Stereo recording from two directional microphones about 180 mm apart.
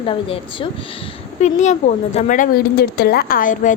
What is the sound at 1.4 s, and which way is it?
A woman's voice, 40° left (ahead or behind).